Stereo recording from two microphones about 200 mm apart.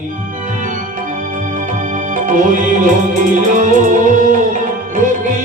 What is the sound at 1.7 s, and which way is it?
Music, 40° right (ahead or behind).